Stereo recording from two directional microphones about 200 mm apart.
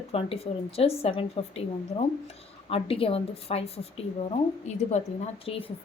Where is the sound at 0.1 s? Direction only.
30° left (ahead or behind).